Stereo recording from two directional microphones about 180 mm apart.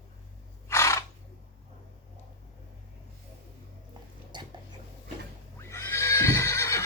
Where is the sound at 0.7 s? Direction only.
15° left (ahead or behind).